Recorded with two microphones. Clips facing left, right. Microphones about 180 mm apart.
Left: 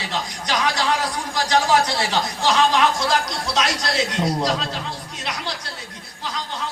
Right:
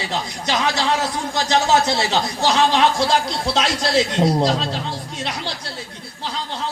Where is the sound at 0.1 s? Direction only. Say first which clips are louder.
Right 1 dB; 25° right (ahead or behind).